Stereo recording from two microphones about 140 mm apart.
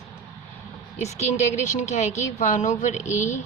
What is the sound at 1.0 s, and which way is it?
Speech, 55° left (ahead or behind).